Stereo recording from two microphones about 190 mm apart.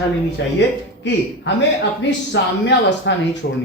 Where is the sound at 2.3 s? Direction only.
65° left (ahead or behind).